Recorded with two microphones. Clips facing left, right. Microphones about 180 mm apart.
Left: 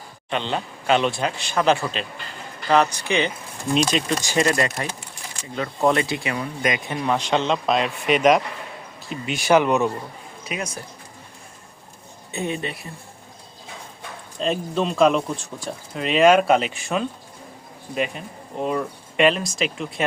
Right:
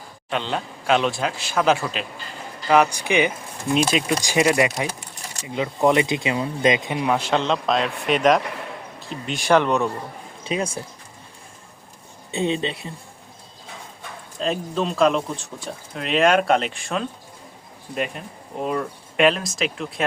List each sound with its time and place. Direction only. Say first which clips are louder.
0.3 s speech: even; centre (ahead or behind); by 7.1 s 15° right (ahead or behind)
7.1 s speech: even; 5° right (ahead or behind)
10.4 s speech: right 5 dB; 30° right (ahead or behind)
12.3 s speech: right 4 dB; 25° right (ahead or behind)
14.3 s speech: left 1 dB; centre (ahead or behind)